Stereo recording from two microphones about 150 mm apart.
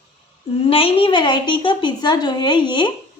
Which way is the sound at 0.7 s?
35° left (ahead or behind).